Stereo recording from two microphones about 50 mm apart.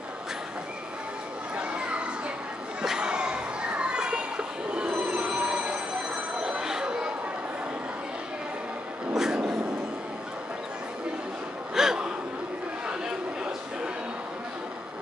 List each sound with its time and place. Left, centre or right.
1.6 s children playing: right
9.1 s a sound: centre
11.7 s gasp: centre